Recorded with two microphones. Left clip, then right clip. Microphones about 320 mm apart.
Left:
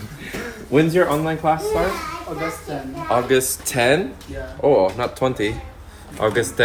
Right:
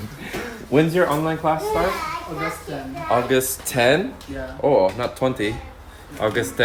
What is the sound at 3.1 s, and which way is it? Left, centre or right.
Speech, centre.